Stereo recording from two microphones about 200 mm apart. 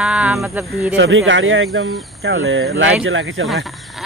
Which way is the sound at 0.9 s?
70° right (ahead or behind).